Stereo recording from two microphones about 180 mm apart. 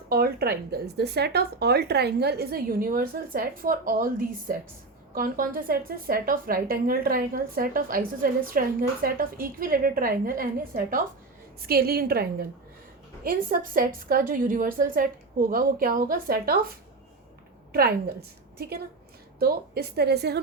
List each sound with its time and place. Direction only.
0.1 s a woman's voice: 60° right (ahead or behind)
17.7 s a woman's voice: 60° right (ahead or behind)